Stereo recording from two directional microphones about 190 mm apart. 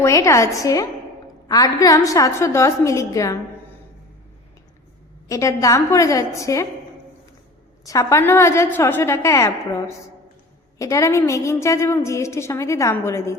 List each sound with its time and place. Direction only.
0.0 s a woman's voice: 15° left (ahead or behind)
5.3 s a woman's voice: 15° left (ahead or behind)
7.9 s a woman's voice: 15° left (ahead or behind)